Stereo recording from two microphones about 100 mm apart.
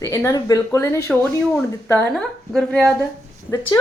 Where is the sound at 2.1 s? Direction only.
5° left (ahead or behind).